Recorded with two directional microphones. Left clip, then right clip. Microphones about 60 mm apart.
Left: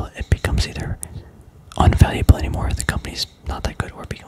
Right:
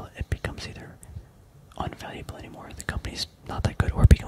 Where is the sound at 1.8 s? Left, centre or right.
Left.